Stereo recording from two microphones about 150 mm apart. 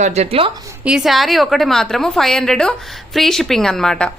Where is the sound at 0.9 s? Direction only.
5° right (ahead or behind).